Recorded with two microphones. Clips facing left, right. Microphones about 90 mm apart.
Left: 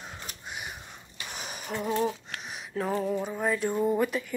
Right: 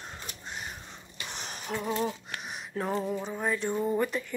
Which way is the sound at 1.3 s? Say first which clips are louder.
Even; 5° left (ahead or behind).